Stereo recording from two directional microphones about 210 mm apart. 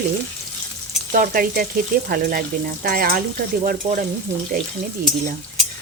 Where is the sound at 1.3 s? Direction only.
45° right (ahead or behind).